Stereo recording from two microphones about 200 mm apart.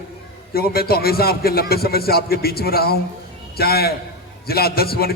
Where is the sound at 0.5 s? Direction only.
50° left (ahead or behind).